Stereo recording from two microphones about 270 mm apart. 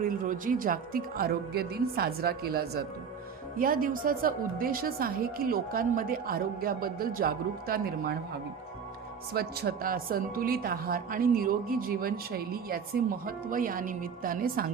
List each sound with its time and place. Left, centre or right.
0.0 s a woman's voice: right
9.3 s a woman's voice: right